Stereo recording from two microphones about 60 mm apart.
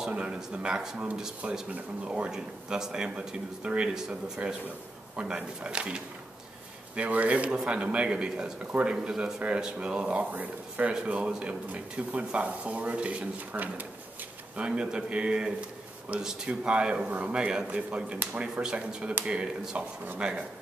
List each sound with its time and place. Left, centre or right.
0.1 s speech: centre
14.6 s speech: centre